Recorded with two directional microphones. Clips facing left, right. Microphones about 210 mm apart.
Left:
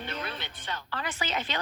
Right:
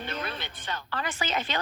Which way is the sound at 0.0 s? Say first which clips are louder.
Right 2 dB; 45° right (ahead or behind).